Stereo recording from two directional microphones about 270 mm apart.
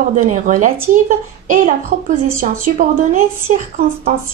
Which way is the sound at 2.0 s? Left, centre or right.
Right.